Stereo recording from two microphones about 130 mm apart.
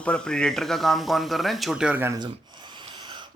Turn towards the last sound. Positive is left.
turn(degrees=-35)  # may be behind; listen again after turning